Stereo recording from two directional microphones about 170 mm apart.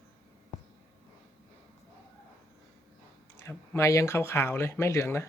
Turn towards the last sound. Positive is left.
turn(degrees=15)  # may be behind; listen again after turning